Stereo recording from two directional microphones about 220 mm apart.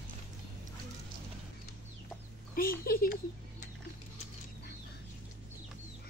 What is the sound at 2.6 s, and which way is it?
Speech, 40° left (ahead or behind).